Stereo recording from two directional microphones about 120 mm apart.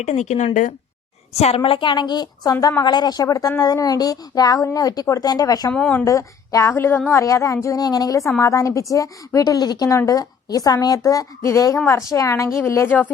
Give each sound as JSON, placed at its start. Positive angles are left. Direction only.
{"t": 0.0, "sound": "speech", "side_deg": 75}
{"t": 1.3, "sound": "a woman's voice", "side_deg": 60}
{"t": 5.7, "sound": "speech", "side_deg": 10}
{"t": 6.1, "sound": "a woman's voice", "side_deg": 25}